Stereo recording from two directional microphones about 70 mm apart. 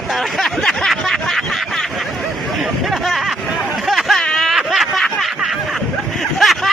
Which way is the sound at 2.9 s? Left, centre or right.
Centre.